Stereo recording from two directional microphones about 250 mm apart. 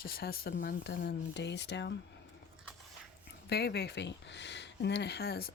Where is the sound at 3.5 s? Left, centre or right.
Left.